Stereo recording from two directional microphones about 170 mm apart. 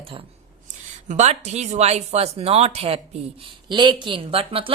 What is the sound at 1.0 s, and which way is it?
A woman's voice, 45° right (ahead or behind).